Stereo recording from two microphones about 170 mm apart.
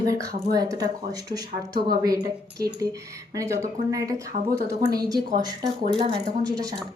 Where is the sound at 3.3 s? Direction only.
20° right (ahead or behind).